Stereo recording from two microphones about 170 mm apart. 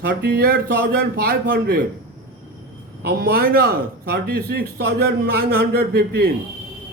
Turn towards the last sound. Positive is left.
turn(degrees=-65)  # may be behind; listen again after turning